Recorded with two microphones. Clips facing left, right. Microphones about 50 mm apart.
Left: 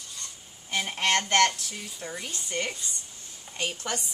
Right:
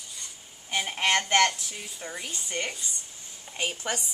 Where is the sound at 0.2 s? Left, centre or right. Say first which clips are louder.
Left 1 dB; centre.